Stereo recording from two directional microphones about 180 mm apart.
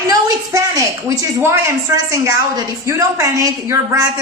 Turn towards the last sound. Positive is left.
turn(degrees=-20)  # may be behind; listen again after turning